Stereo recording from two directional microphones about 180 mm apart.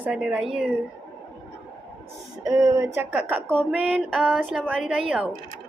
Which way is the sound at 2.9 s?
10° right (ahead or behind).